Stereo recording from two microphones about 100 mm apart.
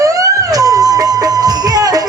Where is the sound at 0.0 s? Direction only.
35° right (ahead or behind).